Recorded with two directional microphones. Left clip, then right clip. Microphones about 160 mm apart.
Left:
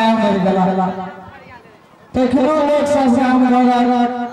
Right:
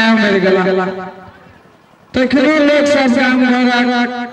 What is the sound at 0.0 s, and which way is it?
Speech, 30° right (ahead or behind).